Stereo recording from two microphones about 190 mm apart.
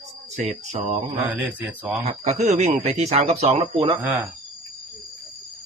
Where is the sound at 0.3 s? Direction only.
40° right (ahead or behind).